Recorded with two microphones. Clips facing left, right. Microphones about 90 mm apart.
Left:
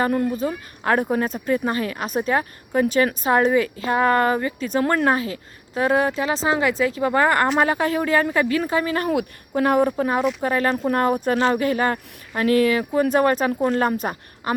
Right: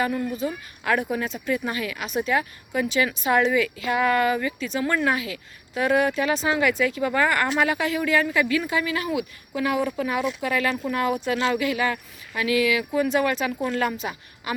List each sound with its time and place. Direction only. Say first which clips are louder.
0.0 s a woman's voice: left 4 dB; 40° left (ahead or behind)